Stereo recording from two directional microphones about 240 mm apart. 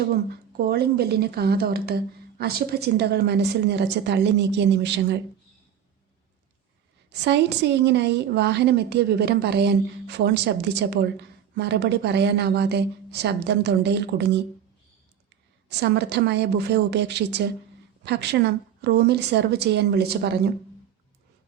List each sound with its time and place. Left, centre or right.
0.5 s a woman's voice: right
7.1 s a woman's voice: right
15.7 s a woman's voice: right